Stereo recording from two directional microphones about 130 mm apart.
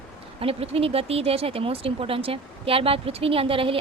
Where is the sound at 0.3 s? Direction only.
50° right (ahead or behind).